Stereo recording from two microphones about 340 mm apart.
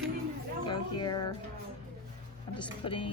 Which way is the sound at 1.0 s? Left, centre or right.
Centre.